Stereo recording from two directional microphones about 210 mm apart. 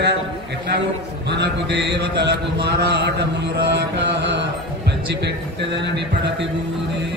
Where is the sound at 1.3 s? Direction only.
55° right (ahead or behind).